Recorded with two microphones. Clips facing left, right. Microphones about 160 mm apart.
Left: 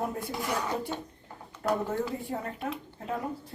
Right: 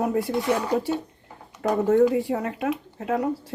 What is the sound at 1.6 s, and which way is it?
Speech, 75° right (ahead or behind).